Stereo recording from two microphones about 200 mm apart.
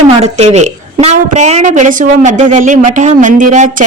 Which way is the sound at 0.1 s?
35° right (ahead or behind).